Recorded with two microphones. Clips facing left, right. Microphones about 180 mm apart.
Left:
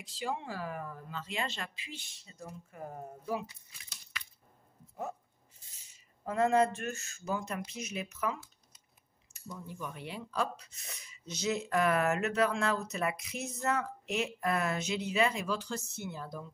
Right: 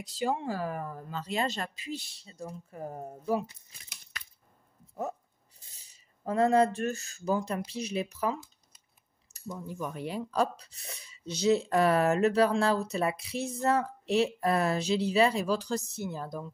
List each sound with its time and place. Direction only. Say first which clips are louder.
0.0 s speech: right 7 dB; 40° right (ahead or behind)
5.8 s speech: right 1 dB; 35° right (ahead or behind)